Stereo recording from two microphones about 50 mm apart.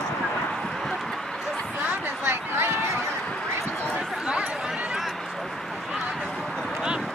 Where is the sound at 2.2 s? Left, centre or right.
Right.